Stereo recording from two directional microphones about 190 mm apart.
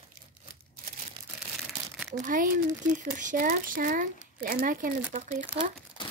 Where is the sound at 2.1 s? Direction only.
45° right (ahead or behind).